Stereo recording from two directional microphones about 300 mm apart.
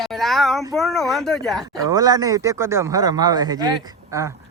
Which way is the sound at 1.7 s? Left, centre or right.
Centre.